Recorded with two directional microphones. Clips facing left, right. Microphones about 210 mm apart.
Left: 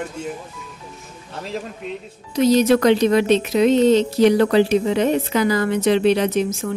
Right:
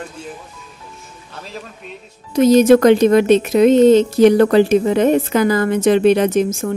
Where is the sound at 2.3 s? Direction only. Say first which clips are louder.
Right 5 dB; 50° right (ahead or behind).